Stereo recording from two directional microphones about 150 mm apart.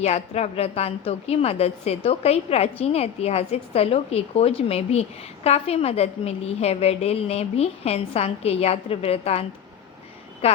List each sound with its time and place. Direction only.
0.0 s a woman's voice: 45° left (ahead or behind)